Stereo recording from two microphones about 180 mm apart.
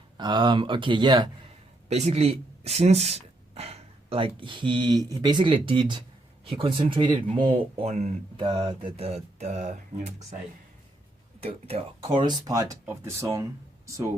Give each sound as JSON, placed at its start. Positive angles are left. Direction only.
{"t": 0.2, "sound": "speech", "side_deg": -25}
{"t": 1.9, "sound": "speech", "side_deg": -35}
{"t": 11.4, "sound": "speech", "side_deg": -35}